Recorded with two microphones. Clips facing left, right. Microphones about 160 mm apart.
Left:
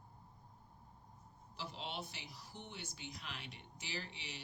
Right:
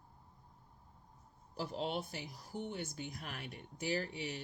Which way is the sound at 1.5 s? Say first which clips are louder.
Right 8 dB; 45° right (ahead or behind).